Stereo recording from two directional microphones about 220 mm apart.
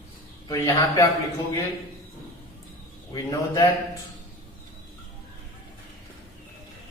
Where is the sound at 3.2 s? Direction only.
20° left (ahead or behind).